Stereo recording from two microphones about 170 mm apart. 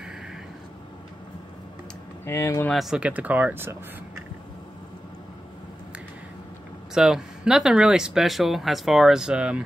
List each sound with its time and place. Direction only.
2.2 s speech: 15° left (ahead or behind)
2.7 s speech: centre (ahead or behind)
6.9 s speech: 5° right (ahead or behind)